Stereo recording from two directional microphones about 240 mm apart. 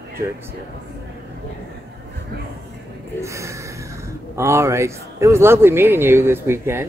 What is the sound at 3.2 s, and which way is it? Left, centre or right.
A man's voice, centre.